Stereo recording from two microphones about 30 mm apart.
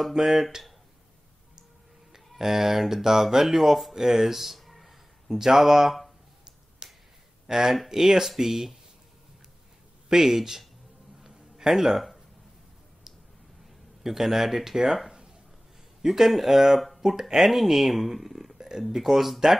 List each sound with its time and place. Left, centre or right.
0.1 s speech: centre
2.1 s speech: centre
5.3 s speech: centre
6.8 s finger snapping: right
7.4 s speech: centre
10.2 s speech: centre
11.1 s a sound: centre
14.0 s speech: centre
16.0 s speech: centre
17.0 s speech: right
17.4 s speech: centre